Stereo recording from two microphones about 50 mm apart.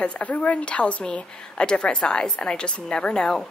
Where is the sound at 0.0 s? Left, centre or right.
Left.